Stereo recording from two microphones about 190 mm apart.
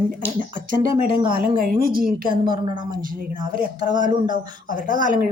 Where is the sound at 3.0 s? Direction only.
45° right (ahead or behind).